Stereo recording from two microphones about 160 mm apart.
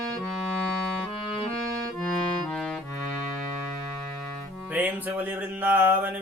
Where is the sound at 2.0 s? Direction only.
5° left (ahead or behind).